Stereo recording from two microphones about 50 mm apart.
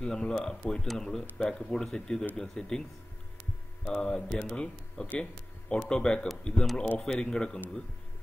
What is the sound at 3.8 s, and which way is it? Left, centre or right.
A man's voice, centre.